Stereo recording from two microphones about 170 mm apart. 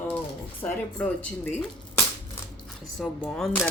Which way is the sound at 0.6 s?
20° left (ahead or behind).